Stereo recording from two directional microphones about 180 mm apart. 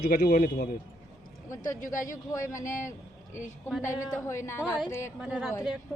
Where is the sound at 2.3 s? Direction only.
15° left (ahead or behind).